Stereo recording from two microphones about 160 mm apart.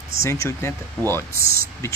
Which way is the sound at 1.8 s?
15° left (ahead or behind).